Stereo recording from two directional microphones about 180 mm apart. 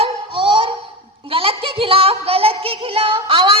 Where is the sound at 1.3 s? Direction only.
30° right (ahead or behind).